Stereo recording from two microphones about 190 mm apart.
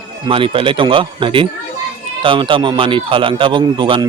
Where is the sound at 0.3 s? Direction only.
25° right (ahead or behind).